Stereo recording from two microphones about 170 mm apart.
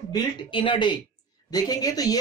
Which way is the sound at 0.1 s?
30° left (ahead or behind).